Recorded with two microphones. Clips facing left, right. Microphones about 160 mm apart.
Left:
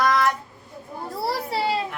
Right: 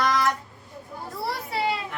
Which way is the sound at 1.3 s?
35° left (ahead or behind).